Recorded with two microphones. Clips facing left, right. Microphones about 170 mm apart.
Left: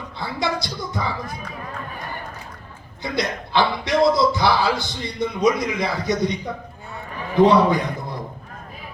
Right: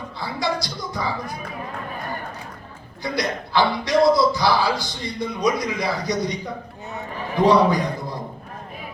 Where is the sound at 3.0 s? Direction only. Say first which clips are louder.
Even; 20° left (ahead or behind).